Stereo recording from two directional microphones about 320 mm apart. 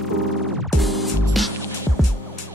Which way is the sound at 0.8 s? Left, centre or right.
Centre.